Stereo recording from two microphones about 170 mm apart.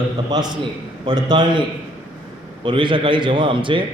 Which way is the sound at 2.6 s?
30° right (ahead or behind).